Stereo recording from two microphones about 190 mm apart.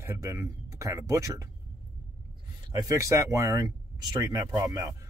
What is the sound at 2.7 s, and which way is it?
Speech, 15° right (ahead or behind).